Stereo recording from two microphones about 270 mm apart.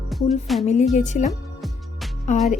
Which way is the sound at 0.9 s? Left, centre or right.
Left.